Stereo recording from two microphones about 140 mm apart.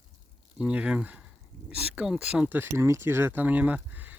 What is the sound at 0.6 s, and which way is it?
Speech, 10° right (ahead or behind).